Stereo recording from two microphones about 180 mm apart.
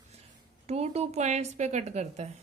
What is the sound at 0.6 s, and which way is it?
A woman's voice, 35° right (ahead or behind).